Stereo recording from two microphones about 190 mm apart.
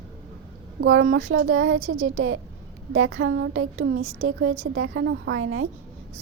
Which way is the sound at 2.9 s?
80° right.